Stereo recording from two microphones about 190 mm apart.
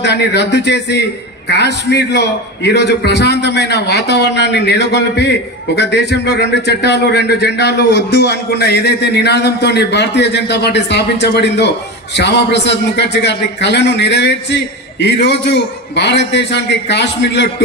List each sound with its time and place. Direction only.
0.0 s a man's voice: 65° left (ahead or behind)